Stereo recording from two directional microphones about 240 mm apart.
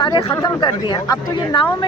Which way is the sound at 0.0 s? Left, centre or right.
Centre.